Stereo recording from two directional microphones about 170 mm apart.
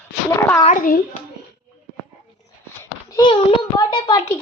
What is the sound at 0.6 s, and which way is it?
Speech, 45° left (ahead or behind).